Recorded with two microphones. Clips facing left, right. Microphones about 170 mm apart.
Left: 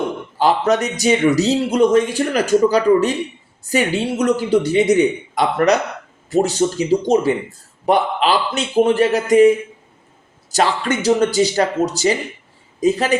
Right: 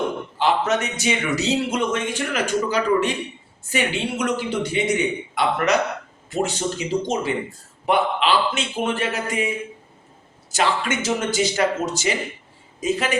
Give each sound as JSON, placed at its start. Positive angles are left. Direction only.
{"t": 0.3, "sound": "a man's voice", "side_deg": 35}
{"t": 10.5, "sound": "a man's voice", "side_deg": 35}